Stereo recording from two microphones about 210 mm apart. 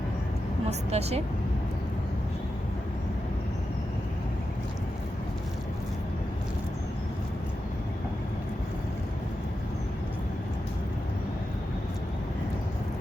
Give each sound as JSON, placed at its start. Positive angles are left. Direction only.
{"t": 0.7, "sound": "a woman's voice", "side_deg": -30}